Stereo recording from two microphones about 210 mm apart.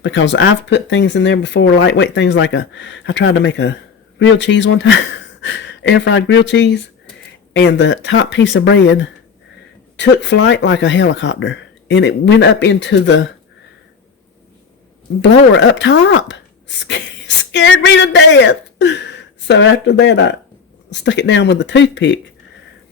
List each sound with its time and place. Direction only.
0.0 s speech: 60° left (ahead or behind)
15.2 s speech: 55° left (ahead or behind)